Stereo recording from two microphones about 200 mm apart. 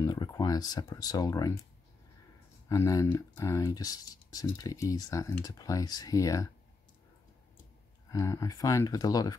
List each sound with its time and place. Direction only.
0.0 s speech: 20° left (ahead or behind)
2.7 s speech: 15° left (ahead or behind)
8.1 s speech: 15° left (ahead or behind)